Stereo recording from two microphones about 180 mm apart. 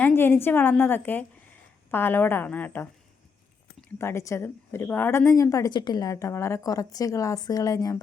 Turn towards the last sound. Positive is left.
turn(degrees=20)  # may be behind; listen again after turning